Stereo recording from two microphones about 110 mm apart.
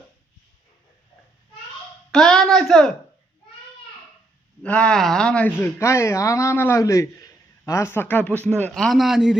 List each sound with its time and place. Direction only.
2.0 s a man's voice: 5° left (ahead or behind)
4.6 s a man's voice: 10° left (ahead or behind)